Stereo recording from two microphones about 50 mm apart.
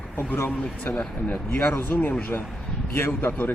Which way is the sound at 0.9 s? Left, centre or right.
Left.